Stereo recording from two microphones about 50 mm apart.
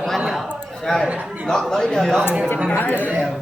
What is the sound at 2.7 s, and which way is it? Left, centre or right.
Speech, left.